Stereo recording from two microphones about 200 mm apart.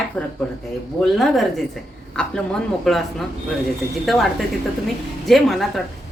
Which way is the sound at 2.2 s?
5° left (ahead or behind).